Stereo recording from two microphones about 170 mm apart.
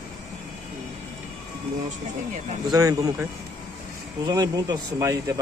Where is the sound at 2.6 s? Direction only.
20° right (ahead or behind).